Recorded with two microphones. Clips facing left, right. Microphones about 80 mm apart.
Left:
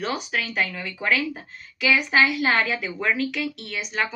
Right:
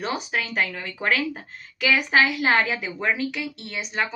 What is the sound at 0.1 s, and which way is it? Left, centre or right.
A woman's voice, right.